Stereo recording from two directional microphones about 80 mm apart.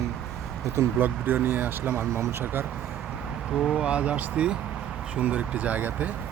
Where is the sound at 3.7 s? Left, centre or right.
Centre.